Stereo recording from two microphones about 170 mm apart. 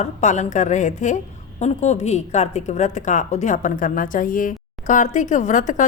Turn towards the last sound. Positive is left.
turn(degrees=50)  # may be behind; listen again after turning